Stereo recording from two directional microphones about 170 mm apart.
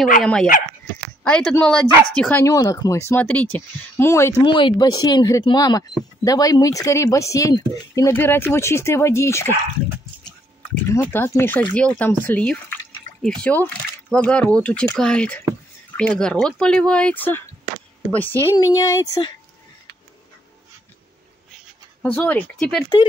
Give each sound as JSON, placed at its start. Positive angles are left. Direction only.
{"t": 0.2, "sound": "speech", "side_deg": 5}
{"t": 2.4, "sound": "speech", "side_deg": 20}
{"t": 11.1, "sound": "speech", "side_deg": 10}
{"t": 18.5, "sound": "speech", "side_deg": 20}
{"t": 22.0, "sound": "speech", "side_deg": 10}